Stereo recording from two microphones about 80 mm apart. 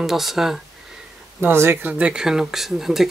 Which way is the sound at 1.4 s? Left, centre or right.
Right.